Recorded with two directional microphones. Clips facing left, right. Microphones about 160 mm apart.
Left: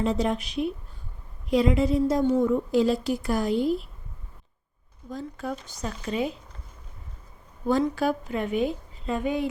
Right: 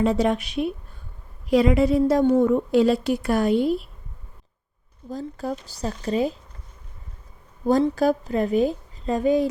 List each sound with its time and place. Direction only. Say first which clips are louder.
0.0 s a woman's voice: right 4 dB; 70° right (ahead or behind)
5.0 s a woman's voice: right 4 dB; 35° right (ahead or behind)
7.7 s a woman's voice: right 4 dB; 40° right (ahead or behind)